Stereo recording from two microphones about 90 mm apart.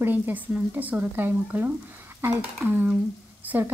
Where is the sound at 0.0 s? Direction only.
20° right (ahead or behind).